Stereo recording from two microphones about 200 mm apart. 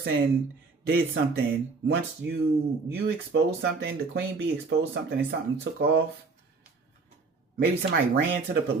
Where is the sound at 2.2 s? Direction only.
65° right (ahead or behind).